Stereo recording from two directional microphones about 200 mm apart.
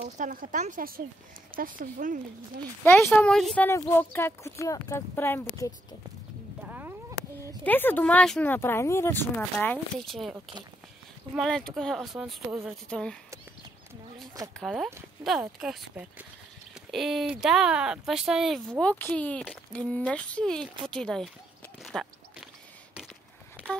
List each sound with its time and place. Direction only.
0.0 s speech: 45° right (ahead or behind)
2.8 s speech: 10° left (ahead or behind)
6.6 s a sound: 10° right (ahead or behind)
7.6 s speech: 10° left (ahead or behind)
14.6 s speech: centre (ahead or behind)
21.8 s a sound: centre (ahead or behind)